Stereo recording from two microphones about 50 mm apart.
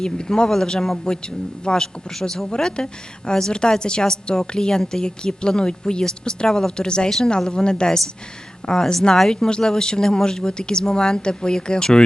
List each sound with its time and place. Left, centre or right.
0.0 s a woman's voice: centre